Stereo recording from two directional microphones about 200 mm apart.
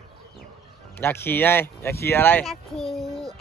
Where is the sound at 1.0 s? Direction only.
10° left (ahead or behind).